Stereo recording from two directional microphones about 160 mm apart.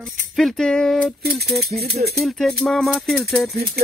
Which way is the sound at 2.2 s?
Centre (ahead or behind).